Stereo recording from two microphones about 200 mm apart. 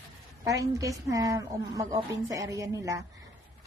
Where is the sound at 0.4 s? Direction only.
15° right (ahead or behind).